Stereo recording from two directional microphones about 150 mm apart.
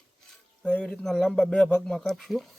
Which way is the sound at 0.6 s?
5° left (ahead or behind).